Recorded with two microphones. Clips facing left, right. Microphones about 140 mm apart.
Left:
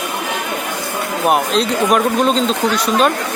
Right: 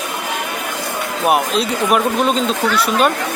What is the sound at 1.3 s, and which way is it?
Speech, 5° right (ahead or behind).